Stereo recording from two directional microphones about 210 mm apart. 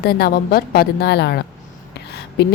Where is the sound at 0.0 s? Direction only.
45° left (ahead or behind).